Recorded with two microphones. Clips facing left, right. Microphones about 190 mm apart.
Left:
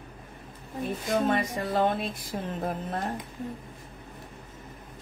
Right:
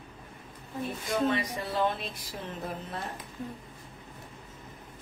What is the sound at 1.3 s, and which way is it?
Speech, 50° left (ahead or behind).